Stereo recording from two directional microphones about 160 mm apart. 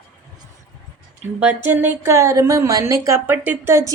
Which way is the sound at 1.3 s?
10° right (ahead or behind).